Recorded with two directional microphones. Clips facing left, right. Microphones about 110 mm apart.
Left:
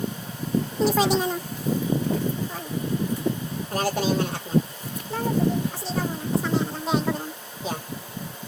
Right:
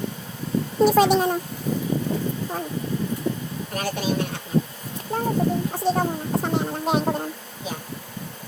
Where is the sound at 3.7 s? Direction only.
30° left (ahead or behind).